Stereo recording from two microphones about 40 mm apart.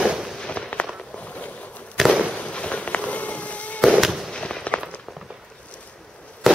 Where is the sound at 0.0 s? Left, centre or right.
Centre.